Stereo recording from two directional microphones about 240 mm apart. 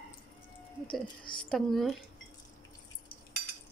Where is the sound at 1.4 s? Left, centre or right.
Centre.